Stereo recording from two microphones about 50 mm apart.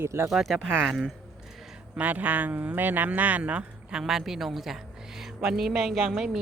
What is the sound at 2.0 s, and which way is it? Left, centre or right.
Speech, right.